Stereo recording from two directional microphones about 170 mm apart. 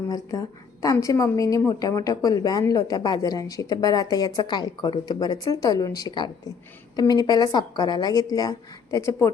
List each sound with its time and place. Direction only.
0.1 s a woman's voice: 20° left (ahead or behind)